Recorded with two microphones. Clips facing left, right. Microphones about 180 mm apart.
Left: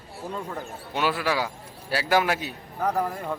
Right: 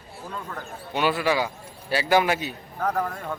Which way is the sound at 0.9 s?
Centre (ahead or behind).